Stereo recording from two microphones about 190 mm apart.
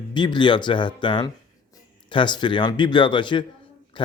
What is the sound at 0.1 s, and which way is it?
A man's voice, 25° left (ahead or behind).